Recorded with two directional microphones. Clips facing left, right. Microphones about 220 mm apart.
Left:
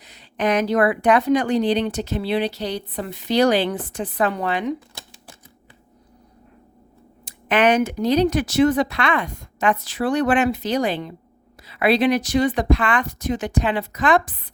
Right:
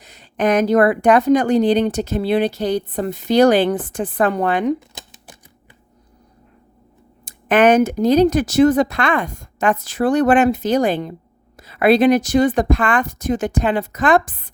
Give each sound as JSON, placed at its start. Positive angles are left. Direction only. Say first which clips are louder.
{"t": 0.0, "sound": "speech", "louder": "right 4 dB", "side_deg": -45}
{"t": 4.9, "sound": "typewriter", "louder": "right 2 dB", "side_deg": -20}
{"t": 7.3, "sound": "speech", "louder": "right 5 dB", "side_deg": -45}